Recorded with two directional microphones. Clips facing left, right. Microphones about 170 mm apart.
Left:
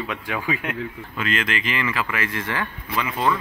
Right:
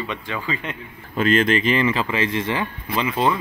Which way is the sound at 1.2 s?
35° right (ahead or behind).